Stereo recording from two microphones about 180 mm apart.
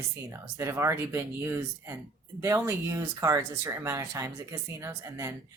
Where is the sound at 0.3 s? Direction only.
15° right (ahead or behind).